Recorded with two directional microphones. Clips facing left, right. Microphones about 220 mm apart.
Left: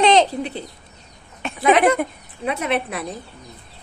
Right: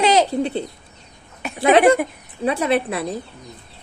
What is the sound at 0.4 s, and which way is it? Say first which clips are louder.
Speech: right 6 dB; 30° right (ahead or behind).